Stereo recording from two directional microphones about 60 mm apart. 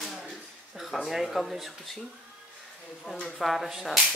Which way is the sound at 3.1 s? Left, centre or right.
Centre.